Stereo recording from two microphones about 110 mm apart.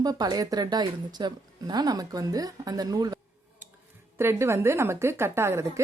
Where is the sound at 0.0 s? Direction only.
35° right (ahead or behind).